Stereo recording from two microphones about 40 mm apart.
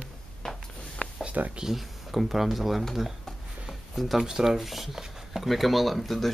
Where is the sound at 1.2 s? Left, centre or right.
Right.